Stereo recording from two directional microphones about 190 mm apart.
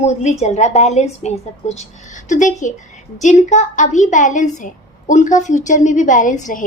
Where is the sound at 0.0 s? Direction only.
35° left (ahead or behind).